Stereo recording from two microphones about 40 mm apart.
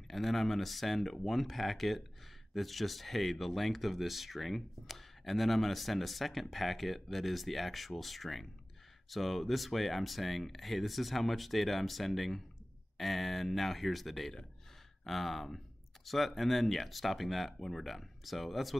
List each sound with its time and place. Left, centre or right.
0.1 s speech: centre